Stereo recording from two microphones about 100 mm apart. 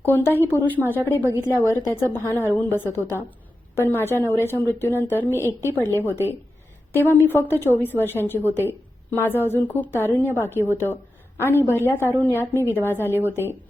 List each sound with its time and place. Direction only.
0.0 s a woman's voice: 20° left (ahead or behind)